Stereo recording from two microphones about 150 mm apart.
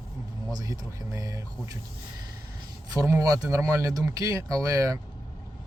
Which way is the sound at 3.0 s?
20° right (ahead or behind).